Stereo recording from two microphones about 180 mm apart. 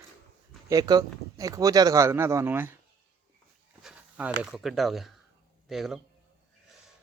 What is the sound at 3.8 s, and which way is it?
Speech, 5° right (ahead or behind).